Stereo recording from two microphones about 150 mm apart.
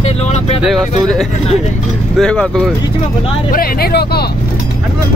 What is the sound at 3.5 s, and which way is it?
Speech, 90° left.